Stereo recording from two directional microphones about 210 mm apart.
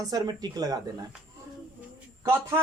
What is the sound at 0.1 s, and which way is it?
Speech, 20° right (ahead or behind).